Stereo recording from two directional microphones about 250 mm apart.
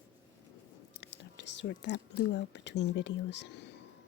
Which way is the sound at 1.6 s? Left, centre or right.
Left.